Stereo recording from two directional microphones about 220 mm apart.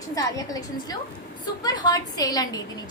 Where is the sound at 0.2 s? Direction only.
15° left (ahead or behind).